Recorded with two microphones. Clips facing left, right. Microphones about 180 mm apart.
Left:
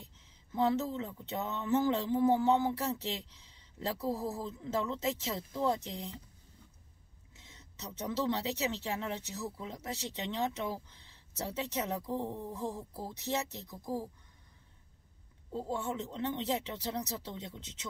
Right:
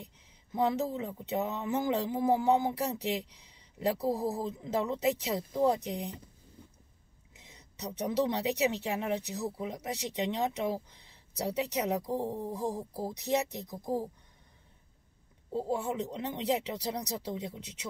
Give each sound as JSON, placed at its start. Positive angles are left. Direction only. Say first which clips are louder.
{"t": 0.0, "sound": "a sound", "louder": "right 5 dB", "side_deg": -15}
{"t": 1.6, "sound": "speech", "louder": "left 5 dB", "side_deg": -15}
{"t": 7.3, "sound": "speech", "louder": "right 4 dB", "side_deg": -15}
{"t": 12.0, "sound": "speech", "louder": "right 3 dB", "side_deg": -35}
{"t": 12.9, "sound": "speech", "louder": "right 5 dB", "side_deg": -15}
{"t": 16.1, "sound": "speech", "louder": "right 1 dB", "side_deg": -15}